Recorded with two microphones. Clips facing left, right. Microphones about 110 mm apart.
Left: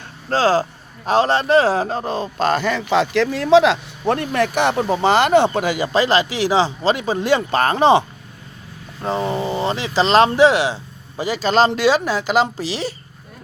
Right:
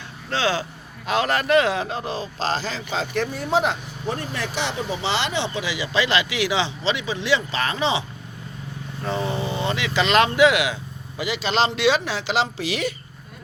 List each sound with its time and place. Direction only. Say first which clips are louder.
0.3 s speech: left 7 dB; 40° left (ahead or behind)
9.0 s speech: left 4 dB; 35° left (ahead or behind)
12.6 s speech: left 1 dB; 30° left (ahead or behind)